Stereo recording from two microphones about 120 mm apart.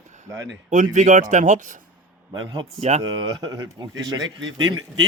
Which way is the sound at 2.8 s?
65° right (ahead or behind).